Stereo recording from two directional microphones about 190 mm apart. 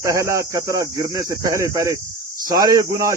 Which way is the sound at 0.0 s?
15° right (ahead or behind).